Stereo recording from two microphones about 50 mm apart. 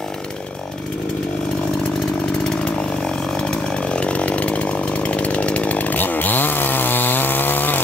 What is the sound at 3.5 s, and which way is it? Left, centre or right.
Chainsaw, left.